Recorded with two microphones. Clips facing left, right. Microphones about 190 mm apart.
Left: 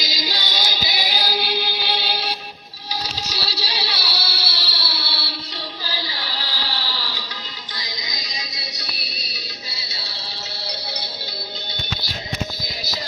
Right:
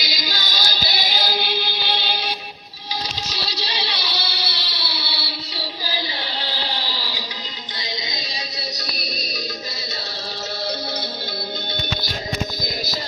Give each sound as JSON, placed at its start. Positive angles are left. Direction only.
{"t": 0.0, "sound": "music", "side_deg": 30}
{"t": 5.8, "sound": "a sound", "side_deg": -20}
{"t": 7.8, "sound": "music", "side_deg": -30}
{"t": 9.0, "sound": "music", "side_deg": -45}